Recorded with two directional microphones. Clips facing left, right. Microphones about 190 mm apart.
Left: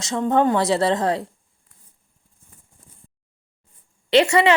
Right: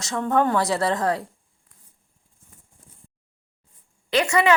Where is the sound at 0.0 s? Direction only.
20° left (ahead or behind).